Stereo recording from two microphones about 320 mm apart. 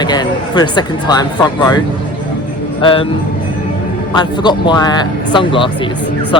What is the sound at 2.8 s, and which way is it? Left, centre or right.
Speech, centre.